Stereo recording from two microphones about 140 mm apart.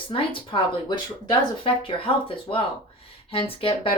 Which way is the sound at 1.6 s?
40° left (ahead or behind).